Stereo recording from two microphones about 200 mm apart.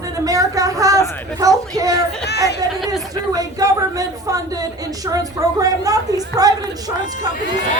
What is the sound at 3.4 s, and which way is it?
A woman's voice, 15° right (ahead or behind).